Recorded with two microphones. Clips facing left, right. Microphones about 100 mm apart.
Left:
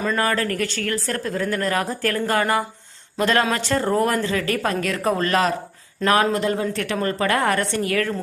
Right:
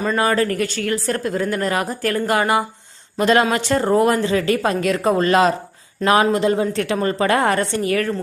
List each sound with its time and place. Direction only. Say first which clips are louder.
0.2 s a woman's voice: right 4 dB; 15° right (ahead or behind)